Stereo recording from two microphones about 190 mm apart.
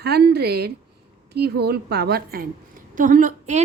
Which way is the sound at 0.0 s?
60° right (ahead or behind).